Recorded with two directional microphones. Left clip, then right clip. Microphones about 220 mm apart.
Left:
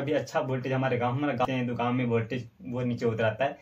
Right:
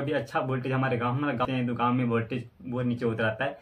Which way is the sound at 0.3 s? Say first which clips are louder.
Even; 5° right (ahead or behind).